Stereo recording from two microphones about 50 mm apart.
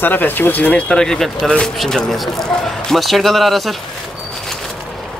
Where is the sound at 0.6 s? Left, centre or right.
Left.